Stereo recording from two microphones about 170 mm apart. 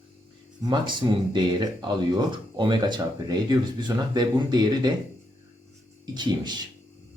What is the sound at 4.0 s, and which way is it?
Speech, 25° right (ahead or behind).